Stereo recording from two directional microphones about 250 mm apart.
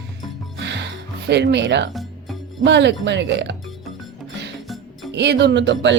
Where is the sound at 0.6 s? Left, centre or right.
Right.